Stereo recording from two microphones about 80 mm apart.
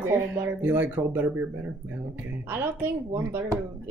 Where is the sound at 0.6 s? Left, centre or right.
Right.